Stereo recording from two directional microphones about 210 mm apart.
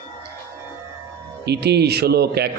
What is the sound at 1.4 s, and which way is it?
A man's voice, 50° right (ahead or behind).